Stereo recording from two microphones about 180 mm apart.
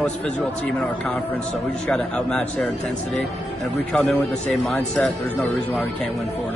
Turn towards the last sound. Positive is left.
turn(degrees=0)  # may be behind; listen again after turning